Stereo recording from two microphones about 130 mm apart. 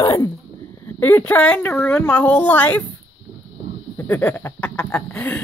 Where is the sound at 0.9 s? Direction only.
15° left (ahead or behind).